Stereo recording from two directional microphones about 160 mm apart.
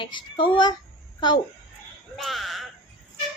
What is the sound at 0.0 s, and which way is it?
Speech, 30° left (ahead or behind).